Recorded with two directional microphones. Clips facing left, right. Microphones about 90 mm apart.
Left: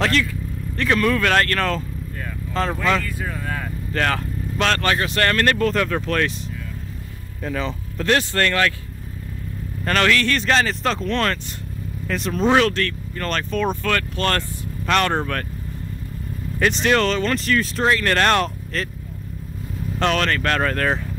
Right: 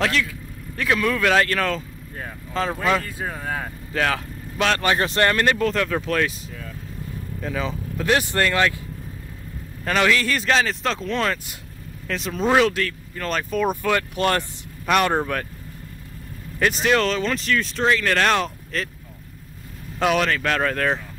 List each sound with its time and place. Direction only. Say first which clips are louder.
0.0 s speech: left 2 dB; centre (ahead or behind)
3.2 s speech: even; 30° right (ahead or behind)
3.9 s vehicle: left 1 dB; 5° right (ahead or behind)
4.9 s speech: right 1 dB; 25° right (ahead or behind)
5.3 s speech: left 1 dB; 10° right (ahead or behind)
7.4 s speech: left 1 dB; centre (ahead or behind)
9.8 s speech: left 1 dB; 10° right (ahead or behind)
16.5 s speech: left 1 dB; centre (ahead or behind)
20.0 s speech: even; 5° right (ahead or behind)